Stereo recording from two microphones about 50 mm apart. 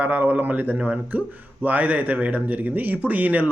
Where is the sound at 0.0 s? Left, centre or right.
Right.